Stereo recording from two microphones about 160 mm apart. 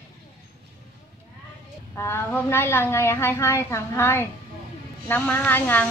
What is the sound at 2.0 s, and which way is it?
A woman's voice, 15° left (ahead or behind).